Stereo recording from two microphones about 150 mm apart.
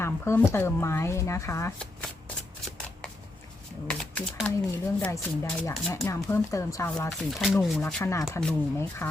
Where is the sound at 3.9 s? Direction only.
5° left (ahead or behind).